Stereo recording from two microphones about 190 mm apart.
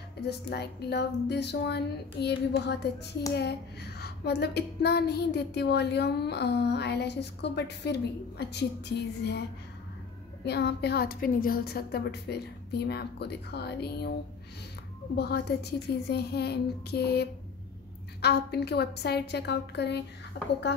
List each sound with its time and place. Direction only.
0.5 s speech: 60° left (ahead or behind)
10.4 s speech: 60° left (ahead or behind)
15.1 s speech: 60° left (ahead or behind)